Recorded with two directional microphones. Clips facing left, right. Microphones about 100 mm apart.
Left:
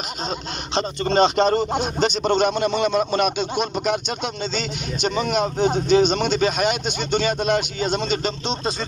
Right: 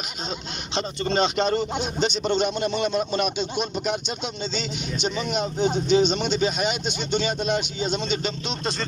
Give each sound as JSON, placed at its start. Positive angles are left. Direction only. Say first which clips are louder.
{"t": 0.7, "sound": "speech", "louder": "left 5 dB", "side_deg": 40}
{"t": 2.6, "sound": "speech", "louder": "left 4 dB", "side_deg": 70}
{"t": 5.0, "sound": "speech", "louder": "left 5 dB", "side_deg": 50}